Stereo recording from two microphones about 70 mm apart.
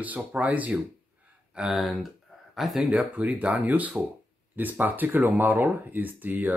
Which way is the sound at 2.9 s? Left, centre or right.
Centre.